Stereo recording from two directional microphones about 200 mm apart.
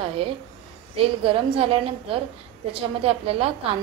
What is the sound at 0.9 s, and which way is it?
A woman's voice, 25° right (ahead or behind).